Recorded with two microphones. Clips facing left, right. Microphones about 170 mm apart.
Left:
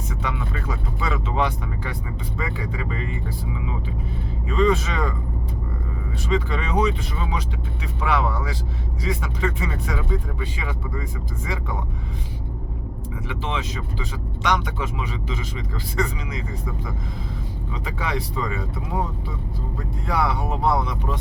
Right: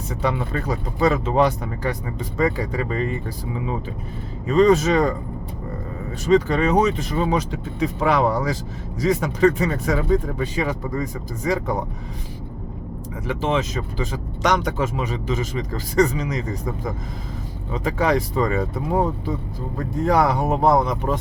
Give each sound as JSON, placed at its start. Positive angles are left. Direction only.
{"t": 0.1, "sound": "speech", "side_deg": -35}
{"t": 13.2, "sound": "speech", "side_deg": -45}